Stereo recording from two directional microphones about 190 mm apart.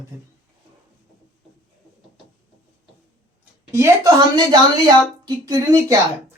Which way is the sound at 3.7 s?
15° right (ahead or behind).